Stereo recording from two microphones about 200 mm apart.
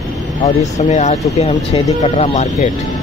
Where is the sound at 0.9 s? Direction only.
35° left (ahead or behind).